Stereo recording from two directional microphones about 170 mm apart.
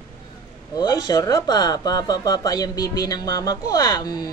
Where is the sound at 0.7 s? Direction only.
20° left (ahead or behind).